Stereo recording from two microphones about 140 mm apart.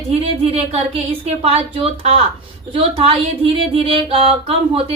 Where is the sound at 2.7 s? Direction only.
45° right (ahead or behind).